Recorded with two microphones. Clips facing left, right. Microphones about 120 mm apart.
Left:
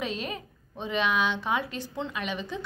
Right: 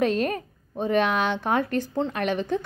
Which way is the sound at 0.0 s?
50° right (ahead or behind).